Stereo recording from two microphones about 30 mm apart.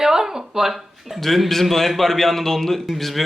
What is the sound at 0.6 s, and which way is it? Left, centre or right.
Speech, centre.